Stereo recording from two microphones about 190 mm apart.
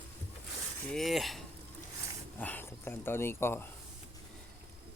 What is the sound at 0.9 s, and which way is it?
Speech, centre (ahead or behind).